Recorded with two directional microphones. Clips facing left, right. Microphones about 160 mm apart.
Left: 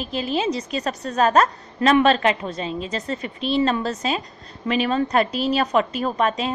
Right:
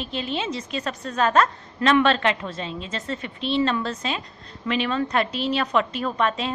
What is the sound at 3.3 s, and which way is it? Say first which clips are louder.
Speech: left 2 dB; 5° left (ahead or behind).